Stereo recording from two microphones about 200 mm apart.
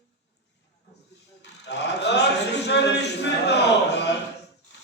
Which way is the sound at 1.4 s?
55° left (ahead or behind).